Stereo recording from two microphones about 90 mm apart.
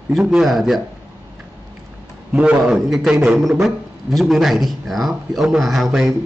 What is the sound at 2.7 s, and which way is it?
Speech, 5° right (ahead or behind).